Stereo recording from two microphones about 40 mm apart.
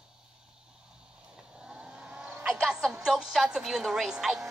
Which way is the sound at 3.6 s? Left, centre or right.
Centre.